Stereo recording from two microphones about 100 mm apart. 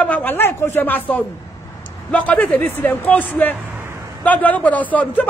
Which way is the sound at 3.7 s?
25° right (ahead or behind).